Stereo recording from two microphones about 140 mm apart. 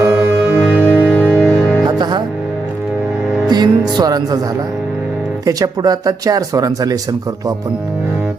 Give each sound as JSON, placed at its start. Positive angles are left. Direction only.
{"t": 0.0, "sound": "music", "side_deg": -20}
{"t": 0.6, "sound": "music", "side_deg": 10}
{"t": 1.9, "sound": "music", "side_deg": -30}
{"t": 3.4, "sound": "music", "side_deg": -30}
{"t": 5.5, "sound": "speech", "side_deg": -25}